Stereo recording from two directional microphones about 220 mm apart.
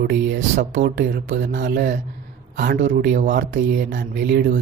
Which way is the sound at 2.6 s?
35° right (ahead or behind).